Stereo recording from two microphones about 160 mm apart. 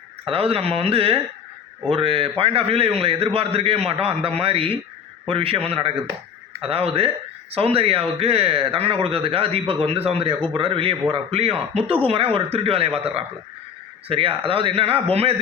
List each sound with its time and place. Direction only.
0.3 s speech: 35° right (ahead or behind)